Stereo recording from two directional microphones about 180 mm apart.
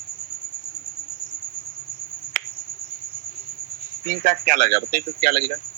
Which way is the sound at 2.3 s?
55° right (ahead or behind).